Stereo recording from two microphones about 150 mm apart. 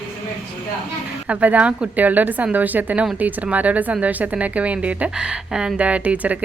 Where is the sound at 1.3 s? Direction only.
10° right (ahead or behind).